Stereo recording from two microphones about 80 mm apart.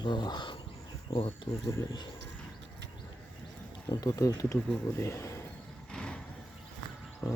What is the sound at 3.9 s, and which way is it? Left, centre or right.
Speech, left.